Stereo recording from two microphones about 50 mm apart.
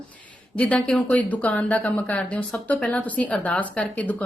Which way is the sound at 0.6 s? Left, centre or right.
Left.